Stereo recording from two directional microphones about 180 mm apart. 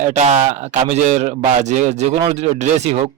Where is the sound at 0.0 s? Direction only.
40° right (ahead or behind).